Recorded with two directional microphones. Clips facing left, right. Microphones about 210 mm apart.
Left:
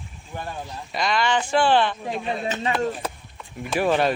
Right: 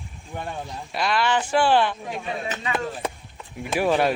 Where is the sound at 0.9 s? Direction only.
5° right (ahead or behind).